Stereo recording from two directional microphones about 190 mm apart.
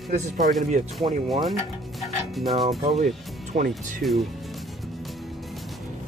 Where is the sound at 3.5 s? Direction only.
45° right (ahead or behind).